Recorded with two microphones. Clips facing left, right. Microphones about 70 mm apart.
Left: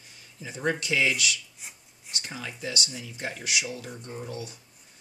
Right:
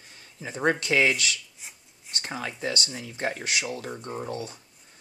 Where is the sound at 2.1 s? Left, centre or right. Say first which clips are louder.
Right 4 dB; right.